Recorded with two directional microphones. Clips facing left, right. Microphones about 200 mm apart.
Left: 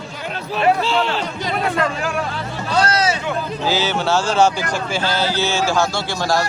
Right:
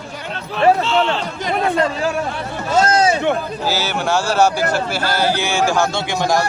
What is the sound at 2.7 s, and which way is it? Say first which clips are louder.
Speech: right 4 dB; 45° right (ahead or behind).